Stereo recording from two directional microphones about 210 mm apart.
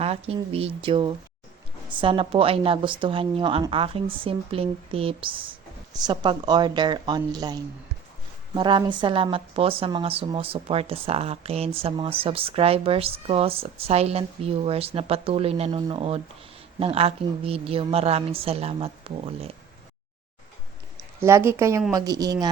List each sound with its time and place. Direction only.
0.0 s a woman's voice: 30° right (ahead or behind)
21.2 s a woman's voice: 10° right (ahead or behind)